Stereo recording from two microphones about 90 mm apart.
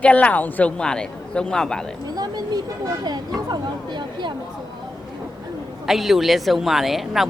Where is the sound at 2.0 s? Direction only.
50° right (ahead or behind).